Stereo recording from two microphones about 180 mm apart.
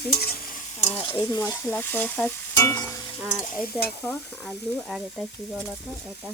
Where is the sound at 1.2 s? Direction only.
20° left (ahead or behind).